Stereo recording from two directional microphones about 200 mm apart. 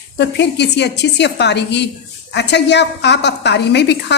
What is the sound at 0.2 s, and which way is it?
Speech, 60° left (ahead or behind).